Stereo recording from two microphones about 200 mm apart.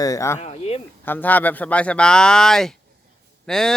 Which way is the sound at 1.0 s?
10° left (ahead or behind).